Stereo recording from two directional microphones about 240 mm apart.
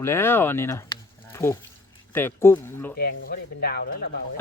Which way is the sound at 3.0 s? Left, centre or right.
Left.